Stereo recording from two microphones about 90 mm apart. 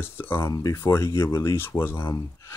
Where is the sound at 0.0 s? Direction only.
25° left (ahead or behind).